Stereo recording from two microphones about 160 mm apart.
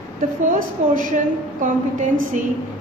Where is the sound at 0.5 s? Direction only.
55° right (ahead or behind).